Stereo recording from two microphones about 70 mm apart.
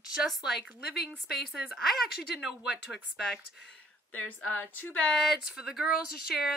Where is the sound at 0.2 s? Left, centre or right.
Centre.